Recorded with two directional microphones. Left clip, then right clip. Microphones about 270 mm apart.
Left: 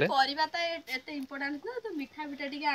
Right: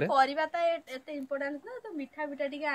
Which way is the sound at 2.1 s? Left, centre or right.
Centre.